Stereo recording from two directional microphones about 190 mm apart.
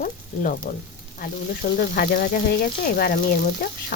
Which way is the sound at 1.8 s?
55° left (ahead or behind).